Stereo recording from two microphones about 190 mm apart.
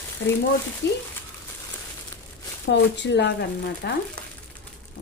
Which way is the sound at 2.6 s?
70° left (ahead or behind).